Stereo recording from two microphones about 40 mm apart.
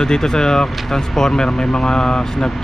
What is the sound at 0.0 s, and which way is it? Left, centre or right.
Speech, centre.